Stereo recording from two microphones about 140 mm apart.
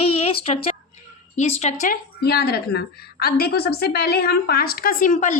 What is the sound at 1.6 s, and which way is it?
Speech, 65° left (ahead or behind).